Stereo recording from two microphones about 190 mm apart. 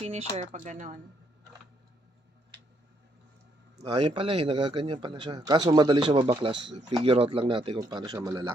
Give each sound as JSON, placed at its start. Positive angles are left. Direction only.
{"t": 0.0, "sound": "speech", "side_deg": -35}
{"t": 3.8, "sound": "a man's voice", "side_deg": -25}